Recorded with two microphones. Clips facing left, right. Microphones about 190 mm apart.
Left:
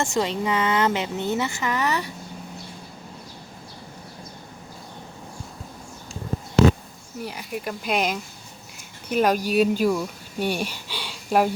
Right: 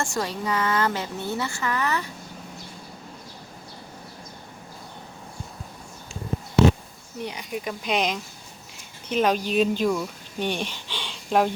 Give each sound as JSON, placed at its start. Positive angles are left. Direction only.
{"t": 0.0, "sound": "a woman's voice", "side_deg": 20}
{"t": 7.2, "sound": "a woman's voice", "side_deg": 5}